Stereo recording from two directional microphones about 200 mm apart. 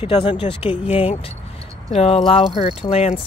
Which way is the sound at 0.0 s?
25° left (ahead or behind).